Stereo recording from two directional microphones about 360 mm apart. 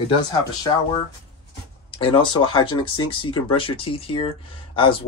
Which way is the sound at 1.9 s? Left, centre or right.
Centre.